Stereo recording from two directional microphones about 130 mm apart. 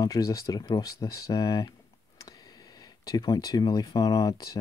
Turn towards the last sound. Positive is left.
turn(degrees=30)  # may be behind; listen again after turning